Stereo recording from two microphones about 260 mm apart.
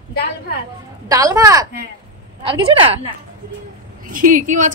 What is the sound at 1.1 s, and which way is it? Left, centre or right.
Speech, centre.